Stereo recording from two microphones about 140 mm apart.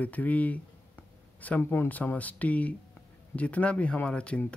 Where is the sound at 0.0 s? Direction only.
10° left (ahead or behind).